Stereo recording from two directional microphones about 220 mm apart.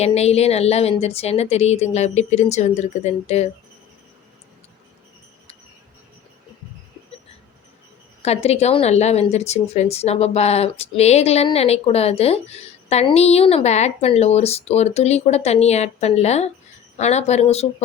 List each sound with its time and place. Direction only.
0.0 s a woman's voice: 30° left (ahead or behind)
8.2 s a woman's voice: 30° left (ahead or behind)